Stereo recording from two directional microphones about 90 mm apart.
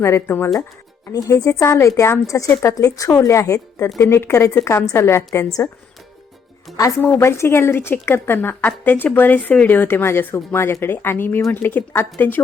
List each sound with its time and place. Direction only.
0.0 s a woman's voice: 25° left (ahead or behind)
1.1 s a woman's voice: 40° left (ahead or behind)
6.7 s speech: centre (ahead or behind)
7.2 s a woman's voice: 30° left (ahead or behind)